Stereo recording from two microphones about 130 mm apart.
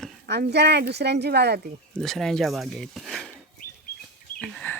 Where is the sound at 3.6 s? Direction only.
90° left.